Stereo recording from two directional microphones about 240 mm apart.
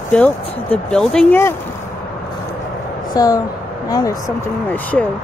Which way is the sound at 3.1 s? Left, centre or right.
Centre.